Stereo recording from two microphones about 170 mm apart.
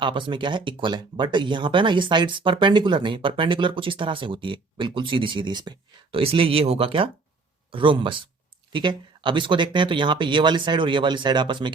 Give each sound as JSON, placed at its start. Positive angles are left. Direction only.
{"t": 0.0, "sound": "speech", "side_deg": -30}